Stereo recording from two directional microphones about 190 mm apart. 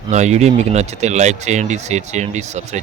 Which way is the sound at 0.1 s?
35° right (ahead or behind).